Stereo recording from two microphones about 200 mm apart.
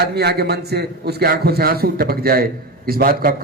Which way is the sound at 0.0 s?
55° right (ahead or behind).